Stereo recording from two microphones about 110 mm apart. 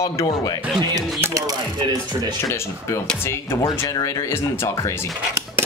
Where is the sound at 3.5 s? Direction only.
35° left (ahead or behind).